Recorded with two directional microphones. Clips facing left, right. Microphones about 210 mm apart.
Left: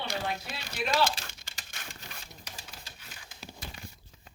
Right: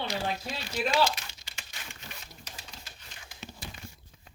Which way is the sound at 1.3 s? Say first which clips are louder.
Even; 50° left (ahead or behind).